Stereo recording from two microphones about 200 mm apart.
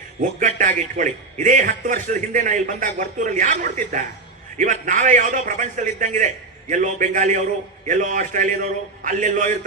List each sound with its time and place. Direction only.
0.2 s a man's voice: 40° right (ahead or behind)